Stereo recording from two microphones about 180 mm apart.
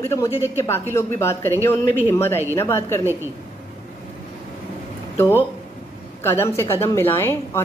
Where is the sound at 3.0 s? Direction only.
15° right (ahead or behind).